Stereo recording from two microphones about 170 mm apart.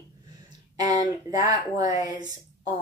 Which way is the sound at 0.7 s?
25° right (ahead or behind).